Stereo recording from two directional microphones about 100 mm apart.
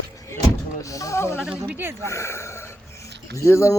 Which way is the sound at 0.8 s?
35° left (ahead or behind).